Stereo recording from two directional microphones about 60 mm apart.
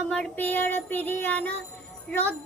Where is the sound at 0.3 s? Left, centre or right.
Left.